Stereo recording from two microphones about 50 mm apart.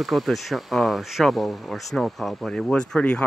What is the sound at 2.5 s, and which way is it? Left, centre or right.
Speech, centre.